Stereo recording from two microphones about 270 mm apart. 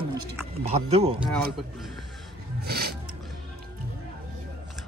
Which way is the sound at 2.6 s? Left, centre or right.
Right.